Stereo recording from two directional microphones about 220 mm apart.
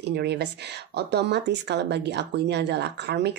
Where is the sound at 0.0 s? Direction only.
50° right (ahead or behind).